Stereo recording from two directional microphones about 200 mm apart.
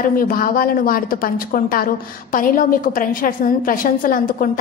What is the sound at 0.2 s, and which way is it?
A woman's voice, 45° left (ahead or behind).